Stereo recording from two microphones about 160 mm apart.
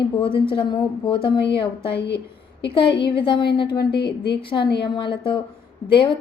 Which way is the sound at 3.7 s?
90° left.